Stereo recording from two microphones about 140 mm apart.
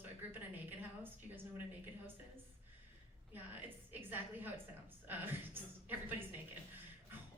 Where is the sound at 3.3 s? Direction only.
15° right (ahead or behind).